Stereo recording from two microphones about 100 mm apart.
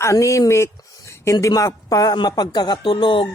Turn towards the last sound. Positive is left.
turn(degrees=55)  # may be behind; listen again after turning